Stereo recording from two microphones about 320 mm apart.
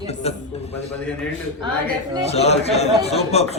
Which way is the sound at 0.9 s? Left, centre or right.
Centre.